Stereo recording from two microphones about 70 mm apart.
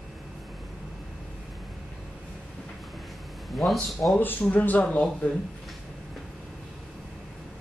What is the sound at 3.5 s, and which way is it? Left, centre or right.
Speech, centre.